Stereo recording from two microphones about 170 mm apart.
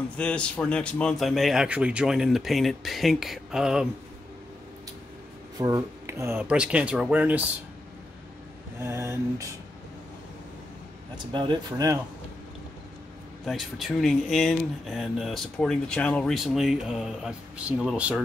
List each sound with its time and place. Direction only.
0.2 s speech: 5° left (ahead or behind)
5.6 s speech: 20° right (ahead or behind)
8.7 s speech: 15° right (ahead or behind)
11.3 s speech: 25° right (ahead or behind)
13.5 s speech: centre (ahead or behind)